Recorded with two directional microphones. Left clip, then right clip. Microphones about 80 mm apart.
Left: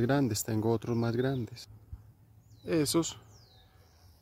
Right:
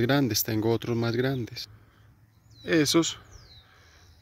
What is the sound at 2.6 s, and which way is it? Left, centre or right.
Speech, right.